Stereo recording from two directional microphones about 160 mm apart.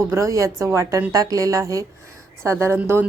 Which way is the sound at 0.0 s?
20° right (ahead or behind).